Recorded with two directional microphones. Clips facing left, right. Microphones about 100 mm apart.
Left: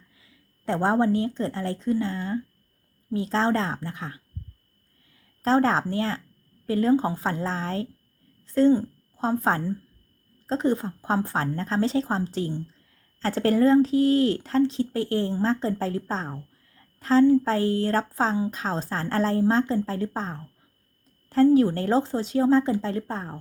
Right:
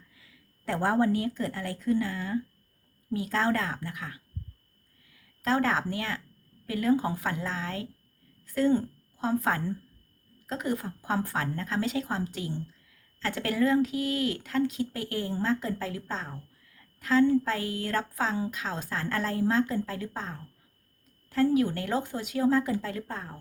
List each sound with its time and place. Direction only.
0.2 s a woman's voice: 25° left (ahead or behind)